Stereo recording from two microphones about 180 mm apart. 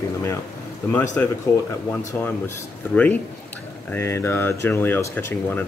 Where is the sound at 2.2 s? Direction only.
10° left (ahead or behind).